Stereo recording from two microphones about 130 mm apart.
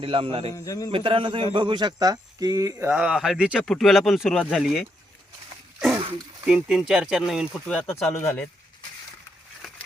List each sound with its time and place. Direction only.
0.0 s a man's voice: 45° right (ahead or behind)
0.5 s a man's voice: 25° left (ahead or behind)
0.9 s a man's voice: 45° right (ahead or behind); by 2.9 s 25° right (ahead or behind)
2.9 s speech: 5° right (ahead or behind)
6.4 s speech: 5° right (ahead or behind)
7.5 s speech: 5° left (ahead or behind)
8.1 s speech: 15° left (ahead or behind)